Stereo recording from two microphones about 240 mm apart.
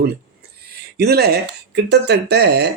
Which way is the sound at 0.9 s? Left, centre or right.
Right.